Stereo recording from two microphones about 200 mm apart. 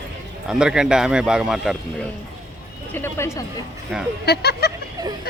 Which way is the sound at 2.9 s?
10° left (ahead or behind).